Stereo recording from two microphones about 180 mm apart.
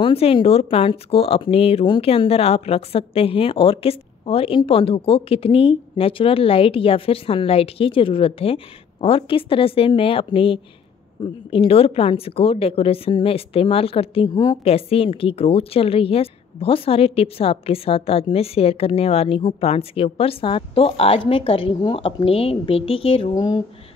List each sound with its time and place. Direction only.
0.0 s a woman's voice: 30° left (ahead or behind)